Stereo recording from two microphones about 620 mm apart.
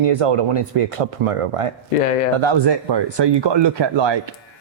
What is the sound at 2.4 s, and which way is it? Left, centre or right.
Speech, right.